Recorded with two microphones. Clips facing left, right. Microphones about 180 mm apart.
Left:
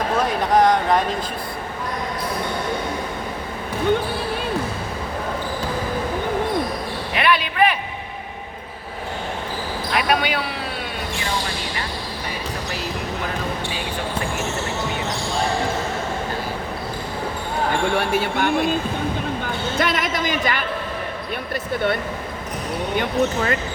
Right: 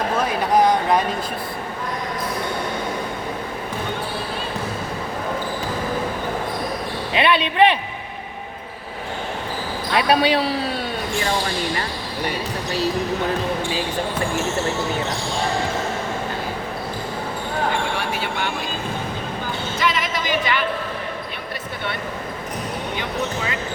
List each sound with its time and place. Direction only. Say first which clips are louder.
0.3 s speech: even; 5° right (ahead or behind)
7.1 s basketball bounce: right 2 dB; 25° right (ahead or behind)
9.9 s speech: right 4 dB; 30° right (ahead or behind)
17.9 s speech: left 5 dB; 50° left (ahead or behind)
19.8 s speech: left 1 dB; 55° left (ahead or behind)
23.0 s speech: left 8 dB; 50° left (ahead or behind)